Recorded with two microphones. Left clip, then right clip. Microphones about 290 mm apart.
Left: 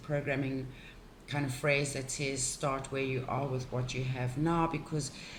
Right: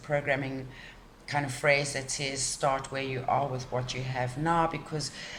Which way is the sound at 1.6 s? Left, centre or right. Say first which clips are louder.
Right 5 dB; right.